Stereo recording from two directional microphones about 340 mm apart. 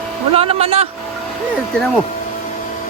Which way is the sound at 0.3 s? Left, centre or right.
Centre.